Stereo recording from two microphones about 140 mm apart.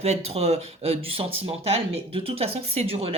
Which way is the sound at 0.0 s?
50° right (ahead or behind).